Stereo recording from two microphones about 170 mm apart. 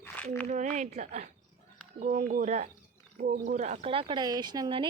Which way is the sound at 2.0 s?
50° right (ahead or behind).